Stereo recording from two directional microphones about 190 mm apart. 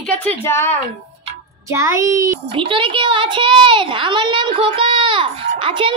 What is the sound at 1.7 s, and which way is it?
Speech, 15° right (ahead or behind).